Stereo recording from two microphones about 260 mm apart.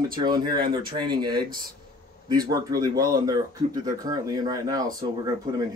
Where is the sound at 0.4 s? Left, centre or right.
Centre.